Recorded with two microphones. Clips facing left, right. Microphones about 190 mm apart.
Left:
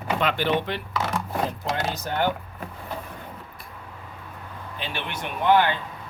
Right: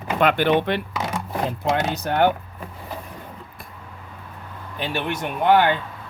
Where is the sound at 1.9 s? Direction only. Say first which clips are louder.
Right 6 dB; 60° right (ahead or behind).